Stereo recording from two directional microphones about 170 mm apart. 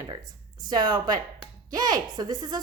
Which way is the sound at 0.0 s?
25° right (ahead or behind).